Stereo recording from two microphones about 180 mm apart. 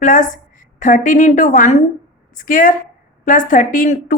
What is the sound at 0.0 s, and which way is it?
Speech, 45° left (ahead or behind).